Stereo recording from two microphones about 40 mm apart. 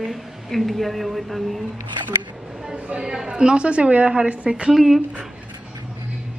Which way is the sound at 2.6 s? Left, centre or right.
Centre.